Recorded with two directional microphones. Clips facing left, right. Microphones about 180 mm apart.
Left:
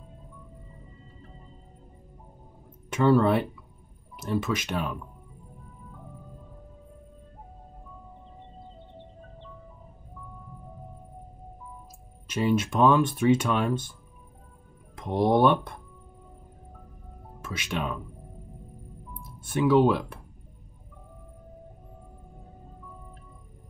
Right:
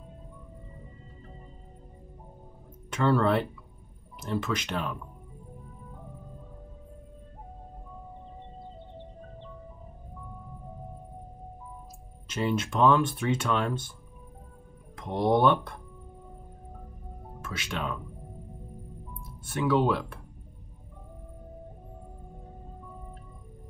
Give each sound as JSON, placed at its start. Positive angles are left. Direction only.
{"t": 2.9, "sound": "speech", "side_deg": 10}
{"t": 12.3, "sound": "speech", "side_deg": 15}
{"t": 15.0, "sound": "speech", "side_deg": 15}
{"t": 17.5, "sound": "speech", "side_deg": 15}
{"t": 19.4, "sound": "speech", "side_deg": 15}